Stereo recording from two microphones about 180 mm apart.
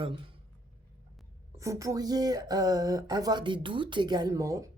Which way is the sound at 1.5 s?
15° right (ahead or behind).